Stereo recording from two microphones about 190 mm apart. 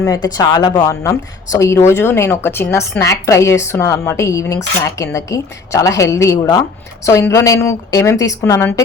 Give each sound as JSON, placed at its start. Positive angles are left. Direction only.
{"t": 0.0, "sound": "speech", "side_deg": 20}